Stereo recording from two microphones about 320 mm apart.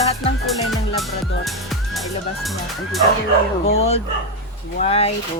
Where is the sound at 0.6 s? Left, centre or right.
Centre.